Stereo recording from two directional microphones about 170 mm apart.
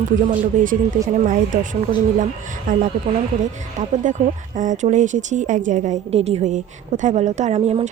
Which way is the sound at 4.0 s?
45° right (ahead or behind).